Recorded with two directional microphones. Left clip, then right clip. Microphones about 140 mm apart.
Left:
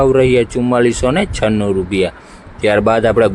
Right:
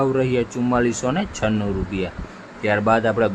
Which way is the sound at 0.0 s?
55° left (ahead or behind).